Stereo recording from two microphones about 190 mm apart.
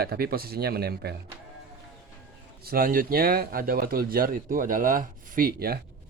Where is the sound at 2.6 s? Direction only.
50° right (ahead or behind).